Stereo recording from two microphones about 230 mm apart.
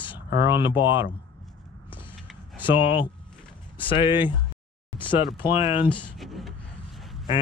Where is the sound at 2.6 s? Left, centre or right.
Left.